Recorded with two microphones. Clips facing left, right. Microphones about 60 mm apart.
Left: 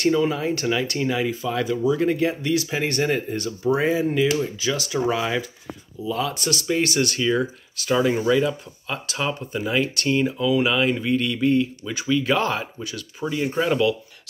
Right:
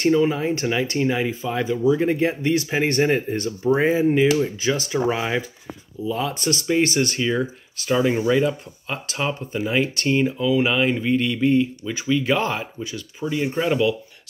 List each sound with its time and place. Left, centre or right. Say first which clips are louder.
0.1 s speech: right 2 dB; centre; by 5.0 s right
5.0 s speech: left 1 dB; right
8.0 s speech: right 1 dB; centre
8.3 s speech: right 1 dB; right
13.3 s speech: even; centre